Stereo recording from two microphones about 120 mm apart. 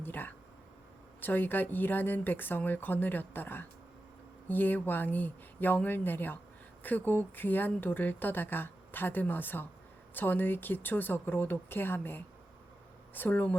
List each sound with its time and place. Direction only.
0.0 s speech: 15° left (ahead or behind)